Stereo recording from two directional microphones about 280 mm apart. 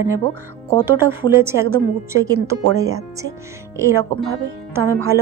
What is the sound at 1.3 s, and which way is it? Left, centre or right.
Speech, centre.